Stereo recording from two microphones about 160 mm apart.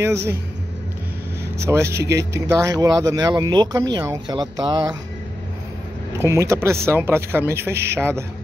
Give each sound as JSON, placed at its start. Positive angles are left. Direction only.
{"t": 0.0, "sound": "a man's voice", "side_deg": -15}
{"t": 1.6, "sound": "speech", "side_deg": -15}
{"t": 6.1, "sound": "a man's voice", "side_deg": -15}